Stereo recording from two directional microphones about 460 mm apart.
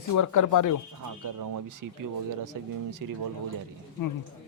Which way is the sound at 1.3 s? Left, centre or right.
Right.